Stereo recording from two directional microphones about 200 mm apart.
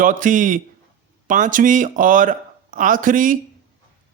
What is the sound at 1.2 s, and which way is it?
Speech, 40° right (ahead or behind).